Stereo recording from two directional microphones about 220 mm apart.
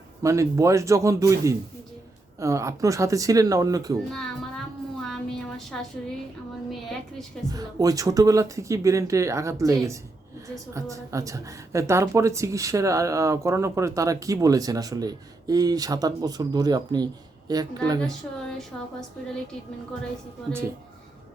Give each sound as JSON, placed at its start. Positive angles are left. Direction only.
{"t": 0.2, "sound": "a woman's voice", "side_deg": -15}
{"t": 4.1, "sound": "a sound", "side_deg": 0}
{"t": 6.7, "sound": "a woman's voice", "side_deg": 0}
{"t": 7.5, "sound": "a woman's voice", "side_deg": -15}
{"t": 18.7, "sound": "a woman's voice", "side_deg": 5}